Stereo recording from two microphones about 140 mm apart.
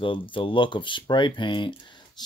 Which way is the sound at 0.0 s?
35° left (ahead or behind).